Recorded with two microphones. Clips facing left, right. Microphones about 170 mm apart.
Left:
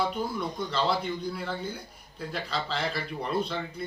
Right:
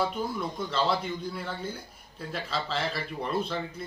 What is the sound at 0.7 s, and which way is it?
Speech, centre (ahead or behind).